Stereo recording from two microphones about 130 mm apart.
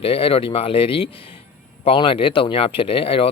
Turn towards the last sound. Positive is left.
turn(degrees=45)  # may be behind; listen again after turning